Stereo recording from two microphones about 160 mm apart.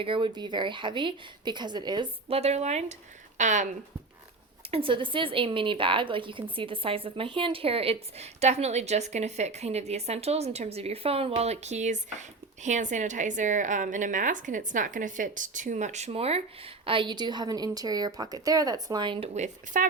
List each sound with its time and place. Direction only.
0.0 s a woman's voice: 30° right (ahead or behind)
2.3 s a woman's voice: 40° right (ahead or behind)
4.7 s a woman's voice: 35° right (ahead or behind)
19.3 s a woman's voice: 50° right (ahead or behind)